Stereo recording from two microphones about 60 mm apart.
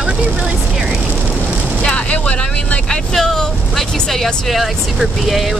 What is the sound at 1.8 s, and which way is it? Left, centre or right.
Vehicle, left.